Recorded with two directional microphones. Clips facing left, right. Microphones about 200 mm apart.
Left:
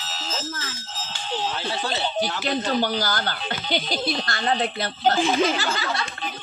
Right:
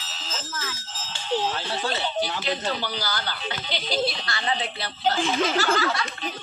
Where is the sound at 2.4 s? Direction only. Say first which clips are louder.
Left 5 dB; 50° left (ahead or behind).